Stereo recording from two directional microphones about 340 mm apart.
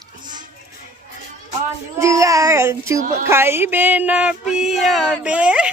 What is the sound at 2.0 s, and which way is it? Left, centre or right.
A child's voice, centre.